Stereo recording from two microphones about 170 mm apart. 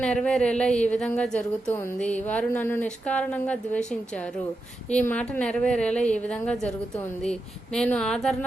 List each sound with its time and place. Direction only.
0.0 s a woman's voice: 5° left (ahead or behind)